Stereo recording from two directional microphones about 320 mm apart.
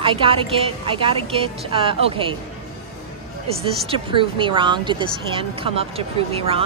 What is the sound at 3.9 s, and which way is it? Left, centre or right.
A woman's voice, centre.